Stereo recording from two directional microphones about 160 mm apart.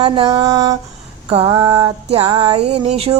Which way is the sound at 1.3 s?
35° right (ahead or behind).